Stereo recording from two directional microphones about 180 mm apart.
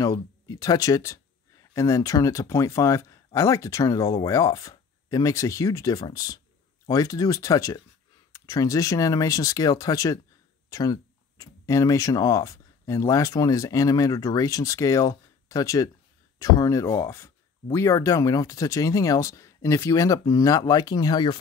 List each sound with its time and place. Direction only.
0.0 s speech: 20° left (ahead or behind)